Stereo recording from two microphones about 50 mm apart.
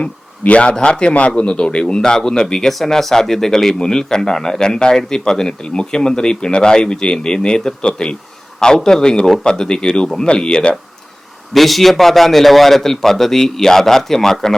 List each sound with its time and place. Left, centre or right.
0.0 s a man's voice: left
11.5 s speech: centre